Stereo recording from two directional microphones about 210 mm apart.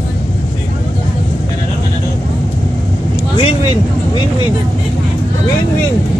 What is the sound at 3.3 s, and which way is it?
Vehicle, 25° left (ahead or behind).